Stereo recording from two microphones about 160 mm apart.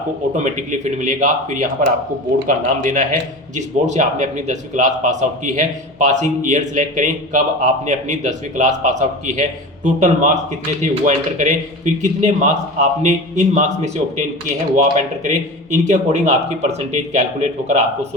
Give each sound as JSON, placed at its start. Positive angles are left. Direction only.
{"t": 0.3, "sound": "a man's voice", "side_deg": -50}